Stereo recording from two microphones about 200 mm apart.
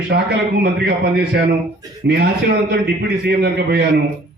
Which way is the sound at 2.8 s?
55° right (ahead or behind).